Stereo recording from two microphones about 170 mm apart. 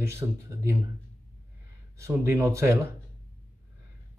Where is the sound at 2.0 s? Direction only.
15° right (ahead or behind).